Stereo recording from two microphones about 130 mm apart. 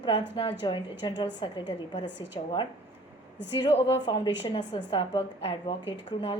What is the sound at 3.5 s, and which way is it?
A woman's voice, 45° left (ahead or behind).